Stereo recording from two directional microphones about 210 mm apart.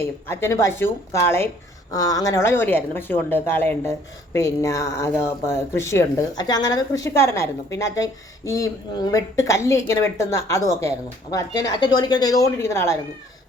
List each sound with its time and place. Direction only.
0.0 s speech: 10° left (ahead or behind)